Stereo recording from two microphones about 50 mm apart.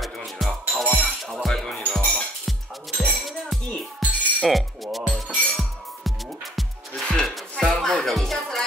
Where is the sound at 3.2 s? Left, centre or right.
Centre.